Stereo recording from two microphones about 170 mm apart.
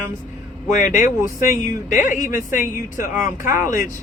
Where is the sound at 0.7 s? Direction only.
50° left (ahead or behind).